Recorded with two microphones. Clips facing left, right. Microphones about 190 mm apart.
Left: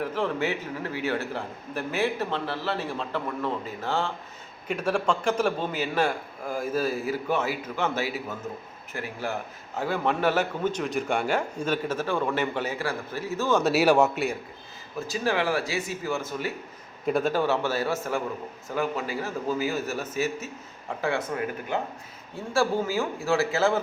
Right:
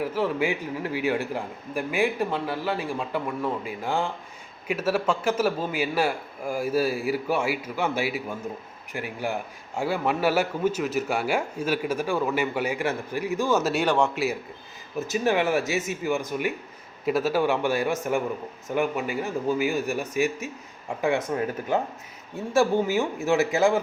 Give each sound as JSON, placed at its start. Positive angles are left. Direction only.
{"t": 0.0, "sound": "a man's voice", "side_deg": -5}
{"t": 14.9, "sound": "a man's voice", "side_deg": -20}
{"t": 17.1, "sound": "a man's voice", "side_deg": -5}
{"t": 22.5, "sound": "a man's voice", "side_deg": -20}